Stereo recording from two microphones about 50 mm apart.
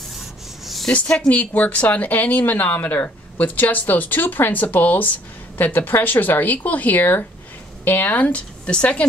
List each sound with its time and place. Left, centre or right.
0.2 s rub: centre
1.3 s a woman's voice: left